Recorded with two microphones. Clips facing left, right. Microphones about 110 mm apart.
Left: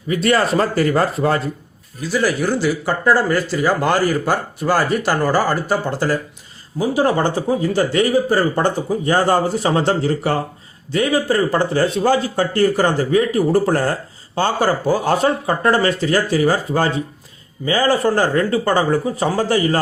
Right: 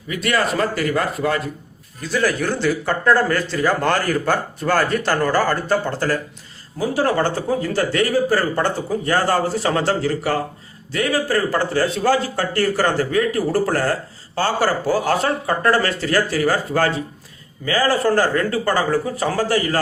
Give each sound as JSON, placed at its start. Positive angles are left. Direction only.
{"t": 0.1, "sound": "speech", "side_deg": 30}
{"t": 2.0, "sound": "a man's voice", "side_deg": 5}